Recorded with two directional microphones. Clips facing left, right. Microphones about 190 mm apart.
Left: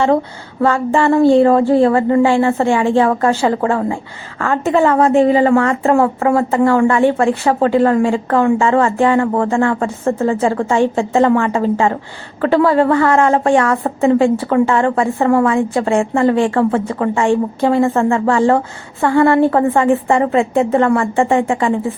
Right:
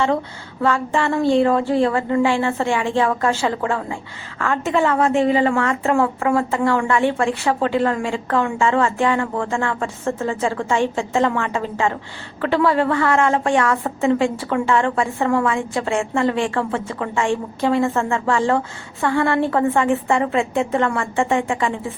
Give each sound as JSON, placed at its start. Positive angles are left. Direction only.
{"t": 0.6, "sound": "a woman's voice", "side_deg": 40}